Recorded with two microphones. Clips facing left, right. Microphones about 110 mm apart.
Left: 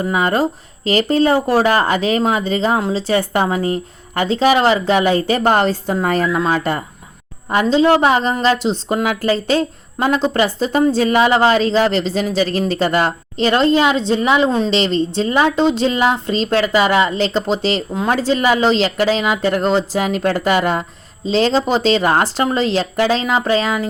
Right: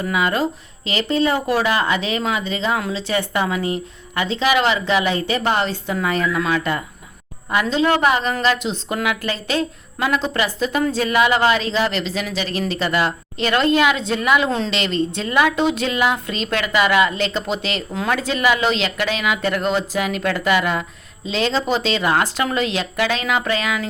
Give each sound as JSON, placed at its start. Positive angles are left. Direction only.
{"t": 0.0, "sound": "a woman's voice", "side_deg": 40}